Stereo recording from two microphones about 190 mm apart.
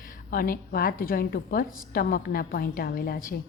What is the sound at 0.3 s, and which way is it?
A woman's voice, 50° left (ahead or behind).